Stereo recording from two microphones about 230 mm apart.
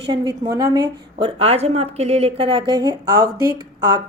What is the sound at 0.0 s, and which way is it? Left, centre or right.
A woman's voice, centre.